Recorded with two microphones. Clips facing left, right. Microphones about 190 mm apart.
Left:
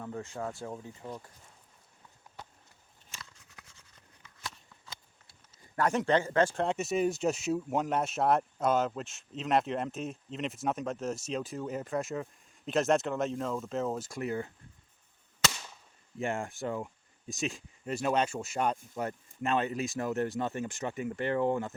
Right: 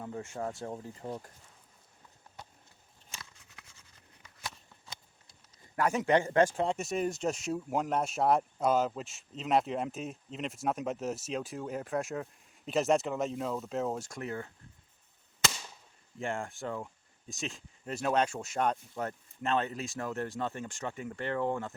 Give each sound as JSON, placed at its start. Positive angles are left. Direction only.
{"t": 0.0, "sound": "speech", "side_deg": -20}
{"t": 5.7, "sound": "a man's voice", "side_deg": -5}
{"t": 16.2, "sound": "speech", "side_deg": 15}